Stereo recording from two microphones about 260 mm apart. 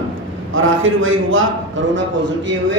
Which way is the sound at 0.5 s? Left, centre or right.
Right.